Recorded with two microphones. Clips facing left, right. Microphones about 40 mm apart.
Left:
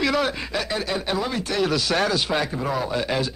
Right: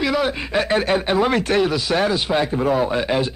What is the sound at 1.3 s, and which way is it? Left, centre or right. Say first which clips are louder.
Speech: right 8 dB; right.